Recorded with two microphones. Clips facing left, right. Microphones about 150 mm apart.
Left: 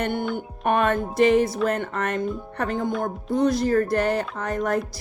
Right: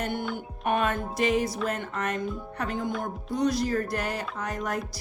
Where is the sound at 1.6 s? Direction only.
55° left (ahead or behind).